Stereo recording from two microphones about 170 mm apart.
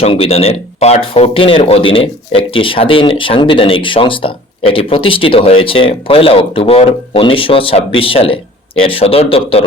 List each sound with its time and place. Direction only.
0.0 s speech: 35° left (ahead or behind)